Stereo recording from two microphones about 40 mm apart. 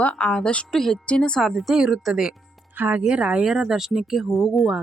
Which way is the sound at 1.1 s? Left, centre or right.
Left.